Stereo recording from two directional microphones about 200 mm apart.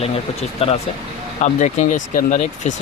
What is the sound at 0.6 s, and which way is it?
Speech, 30° left (ahead or behind).